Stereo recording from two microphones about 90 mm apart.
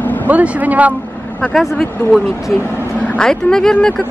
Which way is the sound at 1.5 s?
Centre (ahead or behind).